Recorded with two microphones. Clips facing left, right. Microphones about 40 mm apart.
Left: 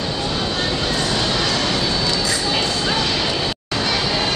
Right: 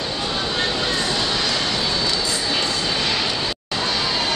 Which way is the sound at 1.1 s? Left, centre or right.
Centre.